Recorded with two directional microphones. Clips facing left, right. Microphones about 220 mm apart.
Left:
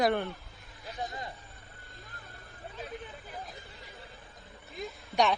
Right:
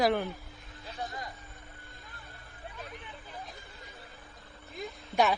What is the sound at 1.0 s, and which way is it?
Vehicle, 25° left (ahead or behind).